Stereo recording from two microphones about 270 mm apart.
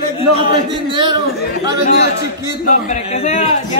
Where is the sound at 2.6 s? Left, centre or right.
Left.